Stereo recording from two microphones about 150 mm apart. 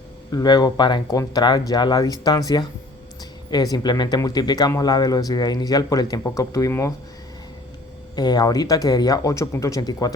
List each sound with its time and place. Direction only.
0.3 s speech: 25° left (ahead or behind)
8.1 s speech: 30° left (ahead or behind)